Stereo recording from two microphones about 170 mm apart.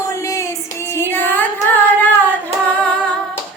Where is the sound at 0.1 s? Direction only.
15° left (ahead or behind).